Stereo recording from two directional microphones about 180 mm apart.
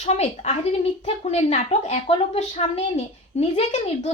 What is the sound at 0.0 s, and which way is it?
A woman's voice, 40° left (ahead or behind).